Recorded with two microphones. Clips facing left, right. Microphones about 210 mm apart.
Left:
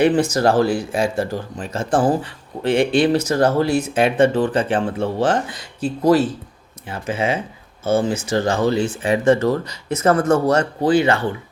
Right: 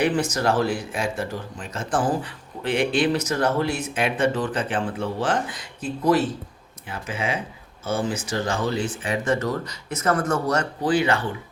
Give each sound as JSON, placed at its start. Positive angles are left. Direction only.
{"t": 0.0, "sound": "speech", "side_deg": 30}